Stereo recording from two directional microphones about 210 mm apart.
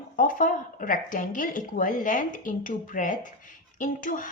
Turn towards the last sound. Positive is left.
turn(degrees=40)  # may be behind; listen again after turning